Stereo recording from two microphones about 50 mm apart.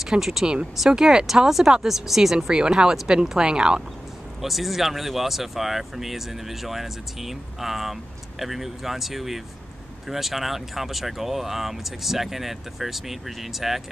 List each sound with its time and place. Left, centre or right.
0.0 s speech: centre
4.4 s speech: centre